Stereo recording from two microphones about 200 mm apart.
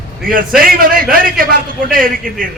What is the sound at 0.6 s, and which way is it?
A man's voice, 45° right (ahead or behind).